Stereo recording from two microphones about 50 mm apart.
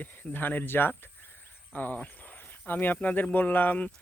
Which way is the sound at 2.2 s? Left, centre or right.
Left.